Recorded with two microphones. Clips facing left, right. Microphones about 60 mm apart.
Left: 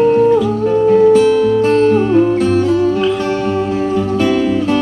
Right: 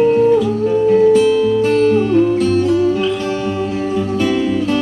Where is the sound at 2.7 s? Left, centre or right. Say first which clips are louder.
Left 1 dB; centre.